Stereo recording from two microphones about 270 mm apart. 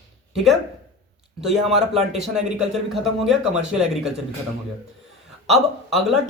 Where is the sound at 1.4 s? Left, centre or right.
Centre.